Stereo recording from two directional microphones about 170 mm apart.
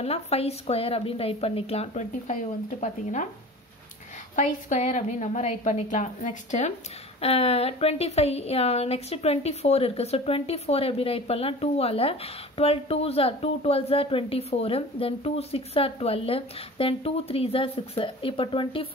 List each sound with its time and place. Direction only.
0.0 s a woman's voice: 35° left (ahead or behind)
4.4 s a woman's voice: 45° left (ahead or behind)